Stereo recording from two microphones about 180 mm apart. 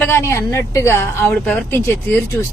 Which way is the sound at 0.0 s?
15° left (ahead or behind).